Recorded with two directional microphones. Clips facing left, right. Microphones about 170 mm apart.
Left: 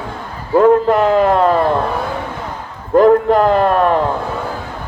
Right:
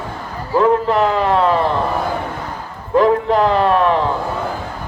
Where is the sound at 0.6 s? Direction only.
50° left (ahead or behind).